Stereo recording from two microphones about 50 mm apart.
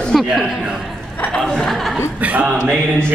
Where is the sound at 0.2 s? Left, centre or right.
Centre.